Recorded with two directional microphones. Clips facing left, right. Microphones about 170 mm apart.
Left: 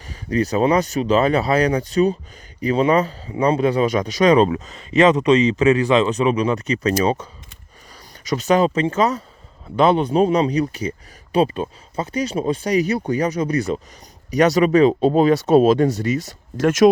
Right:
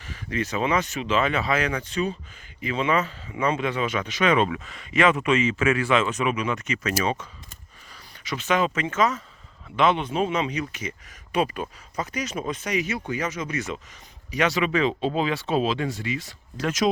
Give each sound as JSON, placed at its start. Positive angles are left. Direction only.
{"t": 0.0, "sound": "speech", "side_deg": 35}